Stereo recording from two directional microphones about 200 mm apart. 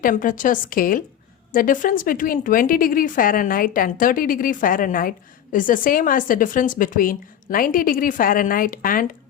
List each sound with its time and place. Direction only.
0.0 s a woman's voice: 40° left (ahead or behind)